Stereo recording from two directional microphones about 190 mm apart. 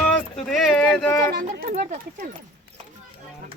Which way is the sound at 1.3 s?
60° right (ahead or behind).